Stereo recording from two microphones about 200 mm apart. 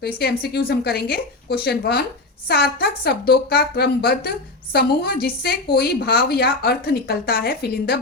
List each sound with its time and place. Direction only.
0.0 s a woman's voice: 55° left (ahead or behind)